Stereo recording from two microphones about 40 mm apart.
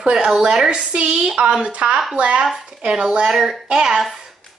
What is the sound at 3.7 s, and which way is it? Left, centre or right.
Speech, centre.